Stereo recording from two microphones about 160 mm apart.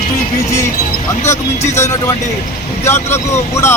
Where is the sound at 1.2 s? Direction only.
45° left (ahead or behind).